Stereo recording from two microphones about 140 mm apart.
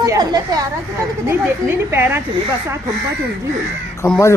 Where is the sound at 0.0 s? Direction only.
25° right (ahead or behind).